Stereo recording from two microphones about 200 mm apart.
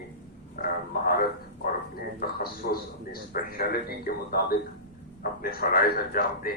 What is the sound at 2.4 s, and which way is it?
A man's voice, 50° left (ahead or behind).